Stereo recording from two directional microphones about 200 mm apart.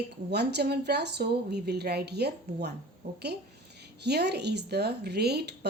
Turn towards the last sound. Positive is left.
turn(degrees=-55)  # may be behind; listen again after turning